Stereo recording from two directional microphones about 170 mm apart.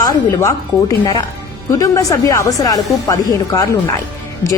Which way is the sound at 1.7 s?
15° left (ahead or behind).